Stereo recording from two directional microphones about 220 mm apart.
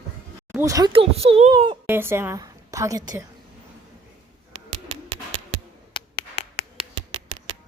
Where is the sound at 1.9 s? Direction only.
10° right (ahead or behind).